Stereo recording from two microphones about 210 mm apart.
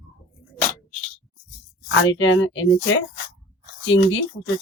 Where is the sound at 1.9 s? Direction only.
65° left (ahead or behind).